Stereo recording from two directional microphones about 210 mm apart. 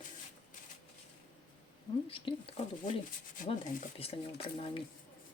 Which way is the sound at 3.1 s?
40° left (ahead or behind).